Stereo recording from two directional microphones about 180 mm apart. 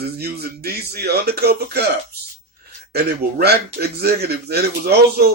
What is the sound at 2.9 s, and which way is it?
Speech, 60° right (ahead or behind).